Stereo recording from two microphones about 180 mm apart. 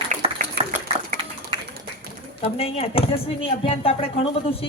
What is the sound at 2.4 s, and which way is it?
A woman's voice, 35° left (ahead or behind).